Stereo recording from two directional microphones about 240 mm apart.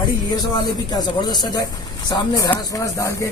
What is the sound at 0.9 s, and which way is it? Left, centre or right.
Speech, centre.